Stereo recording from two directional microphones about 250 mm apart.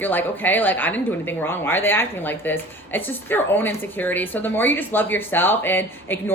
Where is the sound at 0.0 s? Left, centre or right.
Centre.